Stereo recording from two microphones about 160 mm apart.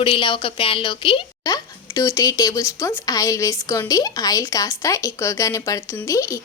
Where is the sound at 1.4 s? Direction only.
20° left (ahead or behind).